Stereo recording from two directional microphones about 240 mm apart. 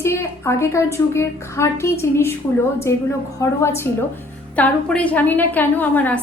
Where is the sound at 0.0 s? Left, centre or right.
Centre.